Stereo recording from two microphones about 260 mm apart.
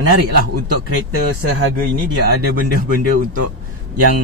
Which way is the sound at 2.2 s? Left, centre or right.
Right.